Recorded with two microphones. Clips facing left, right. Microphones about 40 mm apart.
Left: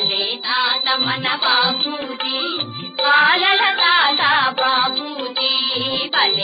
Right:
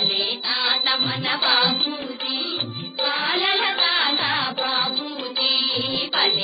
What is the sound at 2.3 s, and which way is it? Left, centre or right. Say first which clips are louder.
Music: left 4 dB; left.